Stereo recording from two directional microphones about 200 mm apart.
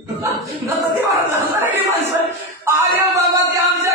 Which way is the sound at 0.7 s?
10° right (ahead or behind).